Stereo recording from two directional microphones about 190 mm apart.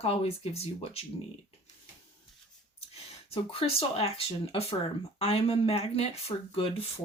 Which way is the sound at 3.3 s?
30° left (ahead or behind).